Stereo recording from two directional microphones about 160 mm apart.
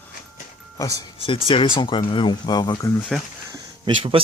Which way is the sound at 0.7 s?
20° left (ahead or behind).